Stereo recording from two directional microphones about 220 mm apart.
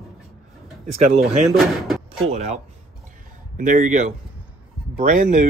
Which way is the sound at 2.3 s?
30° right (ahead or behind).